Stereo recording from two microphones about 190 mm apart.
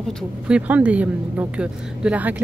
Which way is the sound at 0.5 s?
5° right (ahead or behind).